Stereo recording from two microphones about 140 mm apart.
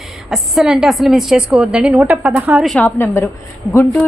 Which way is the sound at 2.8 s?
20° left (ahead or behind).